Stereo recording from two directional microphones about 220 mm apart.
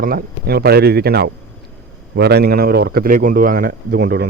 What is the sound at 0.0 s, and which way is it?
A man's voice, 40° right (ahead or behind).